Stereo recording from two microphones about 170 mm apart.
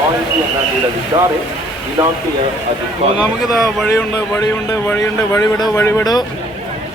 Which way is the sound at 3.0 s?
35° right (ahead or behind).